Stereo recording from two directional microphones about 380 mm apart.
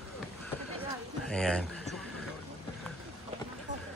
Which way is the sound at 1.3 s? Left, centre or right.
Centre.